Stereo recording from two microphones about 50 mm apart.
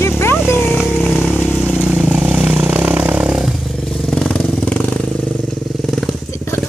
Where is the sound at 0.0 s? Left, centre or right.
Left.